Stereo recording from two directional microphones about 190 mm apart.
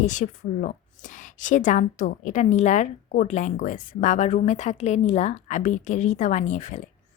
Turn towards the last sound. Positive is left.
turn(degrees=40)  # may be behind; listen again after turning